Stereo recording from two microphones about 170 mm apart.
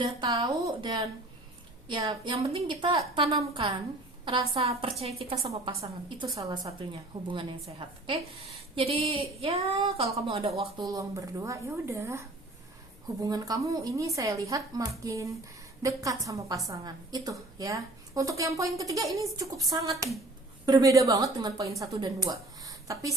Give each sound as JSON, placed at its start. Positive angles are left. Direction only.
{"t": 0.0, "sound": "a woman's voice", "side_deg": -25}
{"t": 10.8, "sound": "a woman's voice", "side_deg": -20}
{"t": 13.2, "sound": "a woman's voice", "side_deg": -20}